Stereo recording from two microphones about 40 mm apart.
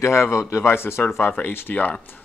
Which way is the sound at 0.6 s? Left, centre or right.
Left.